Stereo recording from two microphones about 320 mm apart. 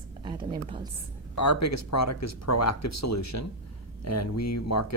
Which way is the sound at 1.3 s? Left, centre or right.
Left.